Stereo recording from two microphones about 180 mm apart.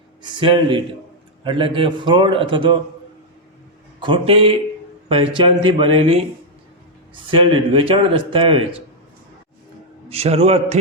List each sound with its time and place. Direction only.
0.2 s speech: 25° right (ahead or behind)
4.0 s a man's voice: 30° right (ahead or behind)
10.1 s a man's voice: 35° right (ahead or behind)